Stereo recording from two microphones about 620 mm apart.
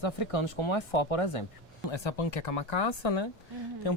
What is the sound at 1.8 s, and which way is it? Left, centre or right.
Speech, left.